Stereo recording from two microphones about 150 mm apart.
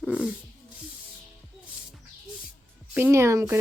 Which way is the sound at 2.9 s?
15° right (ahead or behind).